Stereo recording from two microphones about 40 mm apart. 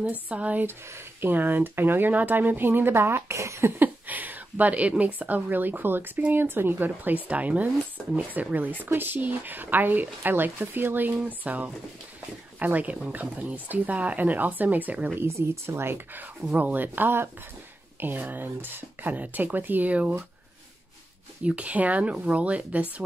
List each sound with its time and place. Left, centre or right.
0.0 s speech: right
0.7 s speech: right
3.8 s a woman's voice: right
8.8 s speech: right
15.1 s speech: right
16.5 s speech: right
19.1 s speech: right
19.9 s speech: right
21.5 s speech: right